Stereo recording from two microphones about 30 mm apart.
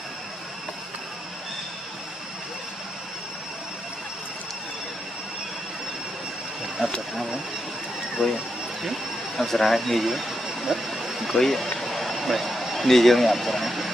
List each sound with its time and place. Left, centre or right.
6.8 s speech: right
8.2 s speech: centre
9.5 s speech: centre
10.9 s a sound: centre
11.3 s speech: centre
11.8 s a sound: centre